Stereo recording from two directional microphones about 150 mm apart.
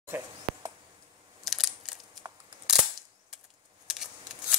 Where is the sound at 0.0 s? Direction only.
20° right (ahead or behind).